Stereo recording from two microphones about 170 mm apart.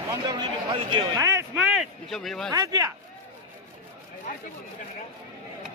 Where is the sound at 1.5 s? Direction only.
5° right (ahead or behind).